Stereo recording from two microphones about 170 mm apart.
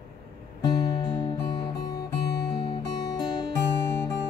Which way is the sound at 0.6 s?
25° left (ahead or behind).